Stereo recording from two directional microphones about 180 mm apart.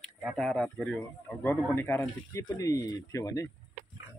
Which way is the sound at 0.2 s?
Centre (ahead or behind).